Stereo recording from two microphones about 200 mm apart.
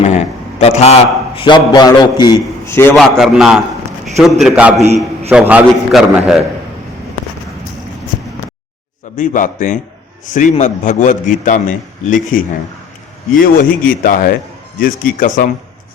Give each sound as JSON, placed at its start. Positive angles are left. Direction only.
{"t": 0.0, "sound": "a man's voice", "side_deg": 35}
{"t": 2.9, "sound": "a man's voice", "side_deg": 0}
{"t": 9.1, "sound": "a man's voice", "side_deg": 40}